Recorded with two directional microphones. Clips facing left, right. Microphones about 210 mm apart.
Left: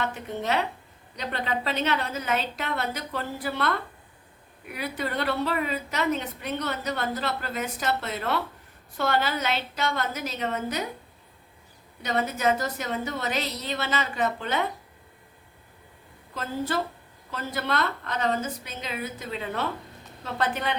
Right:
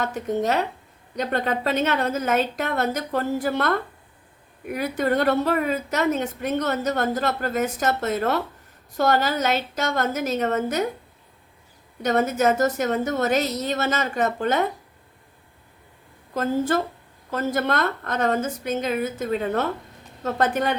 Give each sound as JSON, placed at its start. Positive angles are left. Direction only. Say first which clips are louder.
{"t": 0.0, "sound": "a woman's voice", "louder": "right 6 dB", "side_deg": -40}
{"t": 12.0, "sound": "a woman's voice", "louder": "right 5 dB", "side_deg": -45}
{"t": 16.3, "sound": "a woman's voice", "louder": "right 7 dB", "side_deg": -50}